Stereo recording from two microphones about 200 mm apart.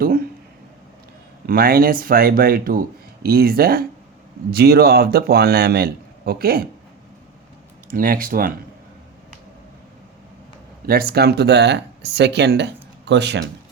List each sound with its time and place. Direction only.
1.5 s a man's voice: 50° right (ahead or behind)
7.9 s a man's voice: 45° right (ahead or behind)
10.8 s speech: 50° right (ahead or behind)